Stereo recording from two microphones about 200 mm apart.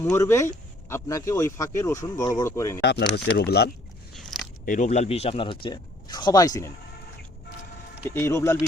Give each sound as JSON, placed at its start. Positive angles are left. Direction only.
{"t": 0.0, "sound": "speech", "side_deg": 15}
{"t": 3.2, "sound": "speech", "side_deg": 55}
{"t": 4.1, "sound": "biting", "side_deg": 0}
{"t": 4.6, "sound": "speech", "side_deg": 40}
{"t": 8.0, "sound": "speech", "side_deg": 15}